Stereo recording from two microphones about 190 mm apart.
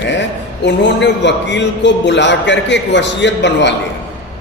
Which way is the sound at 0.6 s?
65° left (ahead or behind).